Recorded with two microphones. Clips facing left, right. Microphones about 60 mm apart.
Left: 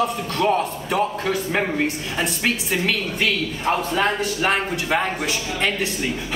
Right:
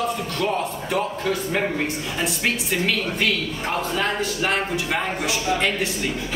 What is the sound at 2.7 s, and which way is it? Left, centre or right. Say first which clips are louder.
Speech: even; centre.